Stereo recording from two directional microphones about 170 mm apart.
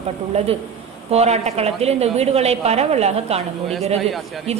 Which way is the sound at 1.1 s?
40° right (ahead or behind).